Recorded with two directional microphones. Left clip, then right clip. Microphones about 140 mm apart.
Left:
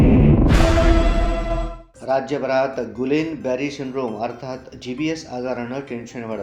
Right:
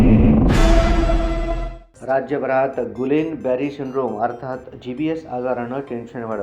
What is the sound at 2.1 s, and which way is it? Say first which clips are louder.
A man's voice: right 1 dB; 10° left (ahead or behind).